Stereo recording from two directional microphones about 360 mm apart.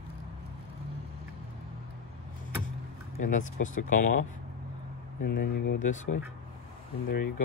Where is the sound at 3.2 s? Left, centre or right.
Left.